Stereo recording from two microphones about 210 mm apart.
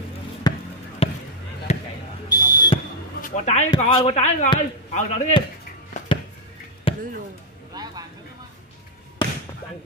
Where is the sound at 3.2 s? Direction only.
35° left (ahead or behind).